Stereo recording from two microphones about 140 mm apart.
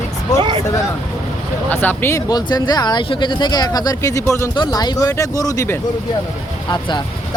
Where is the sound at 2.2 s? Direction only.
30° left (ahead or behind).